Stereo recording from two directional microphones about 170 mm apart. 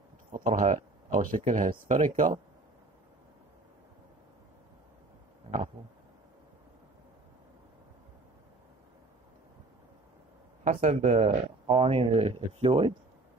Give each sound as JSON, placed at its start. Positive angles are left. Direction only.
{"t": 0.3, "sound": "speech", "side_deg": -50}
{"t": 10.6, "sound": "speech", "side_deg": -45}